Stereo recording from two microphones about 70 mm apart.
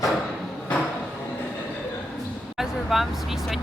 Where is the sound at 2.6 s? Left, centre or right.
Centre.